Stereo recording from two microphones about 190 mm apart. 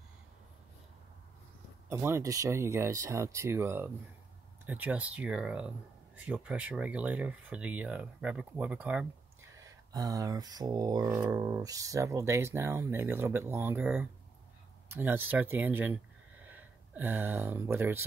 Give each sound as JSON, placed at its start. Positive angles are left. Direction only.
{"t": 1.9, "sound": "speech", "side_deg": -15}
{"t": 9.9, "sound": "speech", "side_deg": -20}